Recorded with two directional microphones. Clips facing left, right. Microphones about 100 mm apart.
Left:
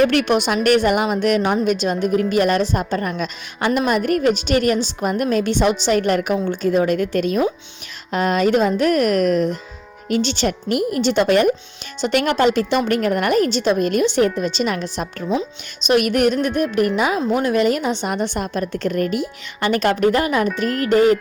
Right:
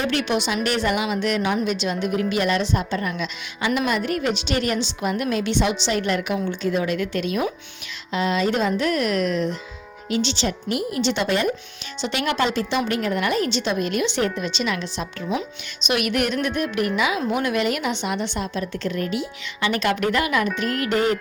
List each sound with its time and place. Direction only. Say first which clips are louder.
0.0 s a woman's voice: left 7 dB; 55° left (ahead or behind); by 21.2 s 40° left (ahead or behind)